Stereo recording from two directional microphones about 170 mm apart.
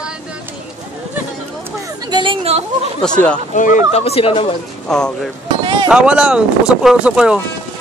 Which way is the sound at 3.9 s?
35° left (ahead or behind).